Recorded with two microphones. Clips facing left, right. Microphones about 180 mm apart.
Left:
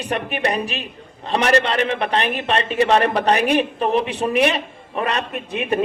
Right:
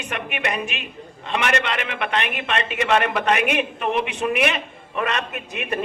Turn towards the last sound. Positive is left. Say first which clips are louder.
# left 5 dB
turn(degrees=30)  # may be behind; listen again after turning